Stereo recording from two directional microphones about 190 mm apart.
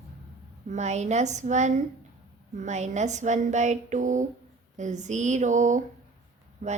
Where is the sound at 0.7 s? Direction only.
35° right (ahead or behind).